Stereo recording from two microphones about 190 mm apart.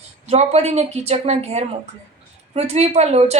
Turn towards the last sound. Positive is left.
turn(degrees=-35)  # may be behind; listen again after turning